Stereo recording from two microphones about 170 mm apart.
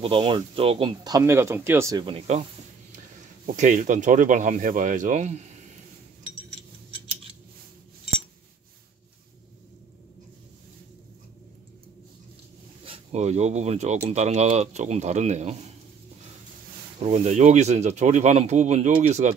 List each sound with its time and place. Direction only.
0.0 s speech: 30° right (ahead or behind)
2.0 s speech: 40° right (ahead or behind)
3.4 s speech: 45° right (ahead or behind)
12.8 s speech: 35° right (ahead or behind)
17.0 s speech: 45° right (ahead or behind)